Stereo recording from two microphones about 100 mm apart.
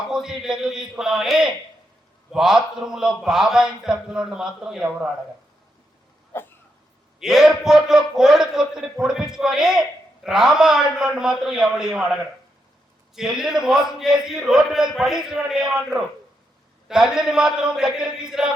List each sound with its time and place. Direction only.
0.1 s a man's voice: 5° right (ahead or behind)
6.3 s cough: 20° left (ahead or behind)
7.2 s a man's voice: 5° right (ahead or behind)